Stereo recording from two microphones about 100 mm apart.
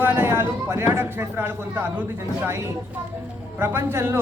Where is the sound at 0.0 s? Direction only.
20° right (ahead or behind).